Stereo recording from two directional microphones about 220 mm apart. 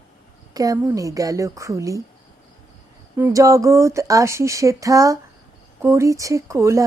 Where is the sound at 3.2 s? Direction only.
10° right (ahead or behind).